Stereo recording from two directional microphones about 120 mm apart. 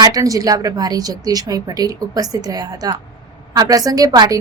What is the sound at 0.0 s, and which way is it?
A woman's voice, 30° right (ahead or behind).